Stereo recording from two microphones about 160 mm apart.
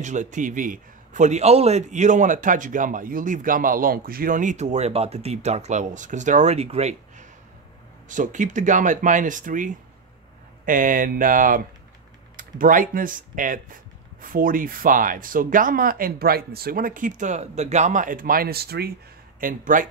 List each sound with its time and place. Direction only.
0.0 s a man's voice: 50° right (ahead or behind); by 18.9 s 80° right
19.4 s speech: 55° right (ahead or behind)